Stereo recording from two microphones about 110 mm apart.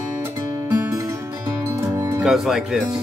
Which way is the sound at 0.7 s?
30° right (ahead or behind).